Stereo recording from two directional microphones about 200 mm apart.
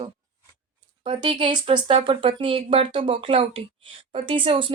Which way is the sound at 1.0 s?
25° right (ahead or behind).